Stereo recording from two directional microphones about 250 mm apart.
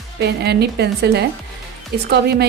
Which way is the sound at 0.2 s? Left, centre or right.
Right.